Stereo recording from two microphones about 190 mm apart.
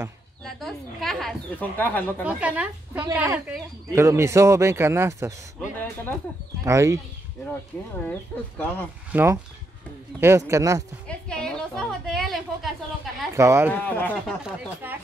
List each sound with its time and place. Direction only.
0.4 s speech: centre (ahead or behind)
2.2 s speech: 5° right (ahead or behind)
6.6 s speech: 15° right (ahead or behind)
8.0 s speech: 10° left (ahead or behind)
9.1 s speech: 10° right (ahead or behind)
11.1 s a woman's voice: 5° left (ahead or behind)
13.4 s speech: 15° right (ahead or behind)
13.7 s speech: 10° left (ahead or behind)
14.4 s speech: 10° right (ahead or behind)